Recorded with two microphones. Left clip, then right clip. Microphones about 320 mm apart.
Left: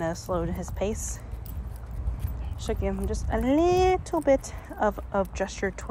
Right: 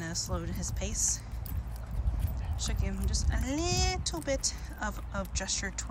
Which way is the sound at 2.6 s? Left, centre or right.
Centre.